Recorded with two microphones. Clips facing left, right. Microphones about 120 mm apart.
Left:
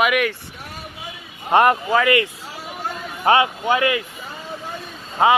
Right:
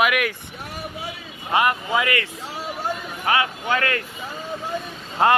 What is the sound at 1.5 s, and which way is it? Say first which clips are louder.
Speech: left 5 dB; 45° left (ahead or behind).